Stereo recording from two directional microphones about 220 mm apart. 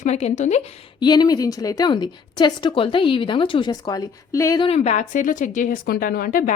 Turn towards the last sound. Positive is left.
turn(degrees=40)  # may be behind; listen again after turning